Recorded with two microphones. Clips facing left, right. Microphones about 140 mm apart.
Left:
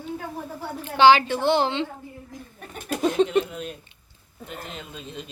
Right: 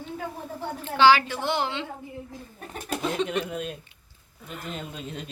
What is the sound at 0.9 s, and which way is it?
A woman's voice, 20° left (ahead or behind).